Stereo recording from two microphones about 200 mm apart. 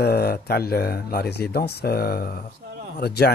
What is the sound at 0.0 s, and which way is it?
Speech, 50° left (ahead or behind).